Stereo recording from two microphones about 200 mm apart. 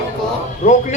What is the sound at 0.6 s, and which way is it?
Speech, 40° left (ahead or behind).